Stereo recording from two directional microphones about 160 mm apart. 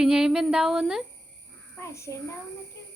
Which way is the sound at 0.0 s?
5° right (ahead or behind).